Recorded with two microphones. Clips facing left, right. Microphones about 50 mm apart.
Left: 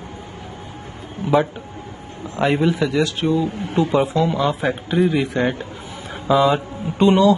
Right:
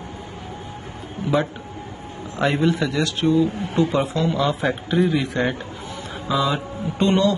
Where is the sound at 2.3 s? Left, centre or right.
Centre.